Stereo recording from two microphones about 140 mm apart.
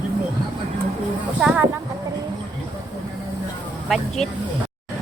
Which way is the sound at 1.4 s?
5° right (ahead or behind).